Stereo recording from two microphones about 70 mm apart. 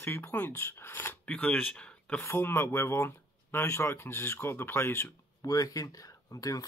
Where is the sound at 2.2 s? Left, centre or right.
Left.